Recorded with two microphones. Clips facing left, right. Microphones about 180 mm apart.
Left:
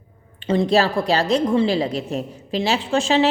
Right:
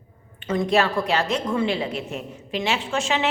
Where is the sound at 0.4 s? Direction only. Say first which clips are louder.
Left 3 dB; 30° left (ahead or behind).